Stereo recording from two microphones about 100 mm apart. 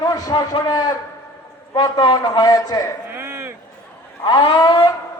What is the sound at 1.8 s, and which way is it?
A man's voice, 45° left (ahead or behind).